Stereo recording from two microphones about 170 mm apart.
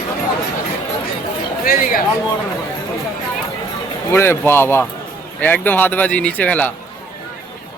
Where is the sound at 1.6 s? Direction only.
55° left (ahead or behind).